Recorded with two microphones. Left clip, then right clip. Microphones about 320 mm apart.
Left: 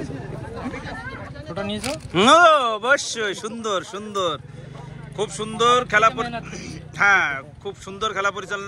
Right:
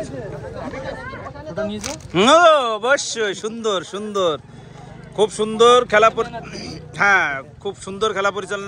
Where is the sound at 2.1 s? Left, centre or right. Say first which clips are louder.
Right 1 dB; centre.